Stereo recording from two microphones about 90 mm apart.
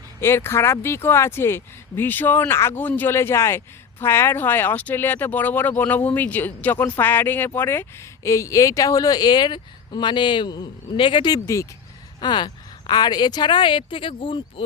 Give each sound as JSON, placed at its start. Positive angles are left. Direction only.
{"t": 0.2, "sound": "speech", "side_deg": 30}
{"t": 11.4, "sound": "speech", "side_deg": 35}
{"t": 12.2, "sound": "speech", "side_deg": 55}